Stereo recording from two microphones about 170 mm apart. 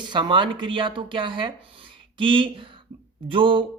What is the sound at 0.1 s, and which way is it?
Speech, 25° right (ahead or behind).